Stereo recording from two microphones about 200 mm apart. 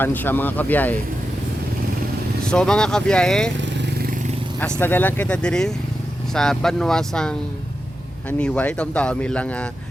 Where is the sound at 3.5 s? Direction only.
65° right (ahead or behind); by 4.3 s 45° right (ahead or behind).